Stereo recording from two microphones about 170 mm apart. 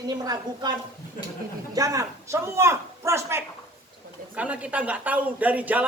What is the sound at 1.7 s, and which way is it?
Speech, 20° right (ahead or behind).